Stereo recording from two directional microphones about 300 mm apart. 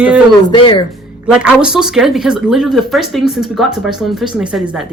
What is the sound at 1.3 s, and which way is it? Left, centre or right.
Speech, centre.